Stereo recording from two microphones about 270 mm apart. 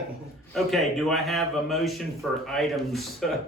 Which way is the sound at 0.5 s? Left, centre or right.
Centre.